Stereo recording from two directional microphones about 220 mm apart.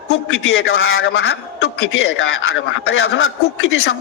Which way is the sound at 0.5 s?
65° left (ahead or behind).